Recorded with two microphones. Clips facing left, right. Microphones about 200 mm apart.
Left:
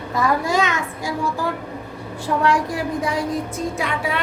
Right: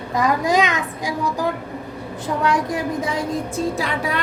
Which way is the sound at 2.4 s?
20° right (ahead or behind).